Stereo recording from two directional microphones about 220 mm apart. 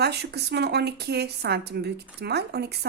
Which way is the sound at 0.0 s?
50° right (ahead or behind).